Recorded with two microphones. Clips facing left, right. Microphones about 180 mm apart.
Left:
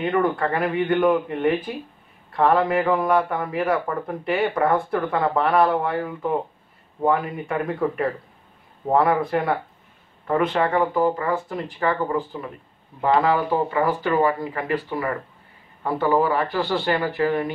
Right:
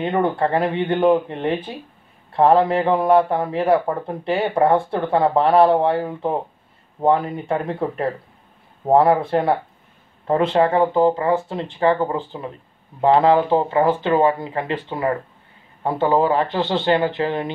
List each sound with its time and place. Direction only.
0.0 s speech: 25° right (ahead or behind)